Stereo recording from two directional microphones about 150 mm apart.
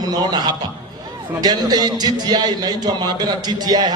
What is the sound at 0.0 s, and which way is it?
A man's voice, 25° right (ahead or behind).